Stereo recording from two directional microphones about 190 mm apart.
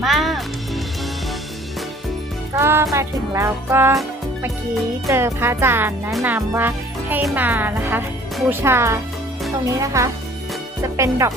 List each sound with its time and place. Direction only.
0.0 s music: centre (ahead or behind)
2.6 s speech: 15° right (ahead or behind)
5.0 s speech: 15° right (ahead or behind)